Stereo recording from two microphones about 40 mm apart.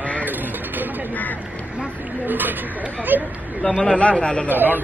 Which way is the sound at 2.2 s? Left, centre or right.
Right.